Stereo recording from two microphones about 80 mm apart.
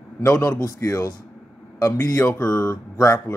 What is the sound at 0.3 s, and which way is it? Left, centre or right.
Speech, centre.